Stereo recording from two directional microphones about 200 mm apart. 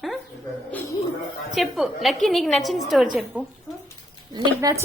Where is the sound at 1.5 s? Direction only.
Centre (ahead or behind).